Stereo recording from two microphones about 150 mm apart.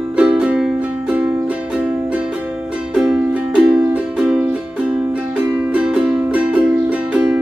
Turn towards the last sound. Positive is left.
turn(degrees=-10)  # may be behind; listen again after turning